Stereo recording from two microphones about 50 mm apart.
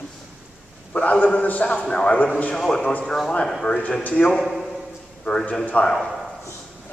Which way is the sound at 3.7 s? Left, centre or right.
Left.